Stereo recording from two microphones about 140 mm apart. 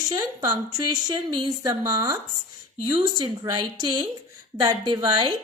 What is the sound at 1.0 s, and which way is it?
A woman's voice, 30° right (ahead or behind).